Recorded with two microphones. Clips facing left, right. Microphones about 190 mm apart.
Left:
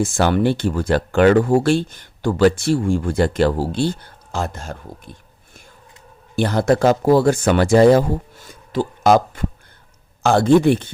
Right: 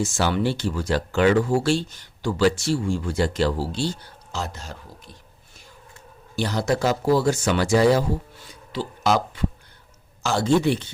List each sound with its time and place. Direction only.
0.0 s speech: 55° left (ahead or behind)
6.3 s speech: 55° left (ahead or behind)